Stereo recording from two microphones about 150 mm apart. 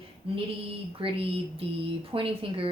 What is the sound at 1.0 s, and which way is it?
Speech, 35° right (ahead or behind).